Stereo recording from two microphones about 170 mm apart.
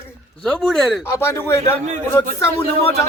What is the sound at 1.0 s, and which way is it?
Speech, 15° left (ahead or behind).